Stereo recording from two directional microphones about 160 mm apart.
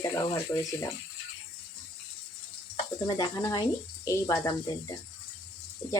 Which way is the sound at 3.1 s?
25° left (ahead or behind).